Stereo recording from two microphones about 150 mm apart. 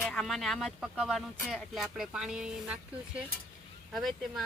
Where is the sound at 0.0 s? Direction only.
5° left (ahead or behind).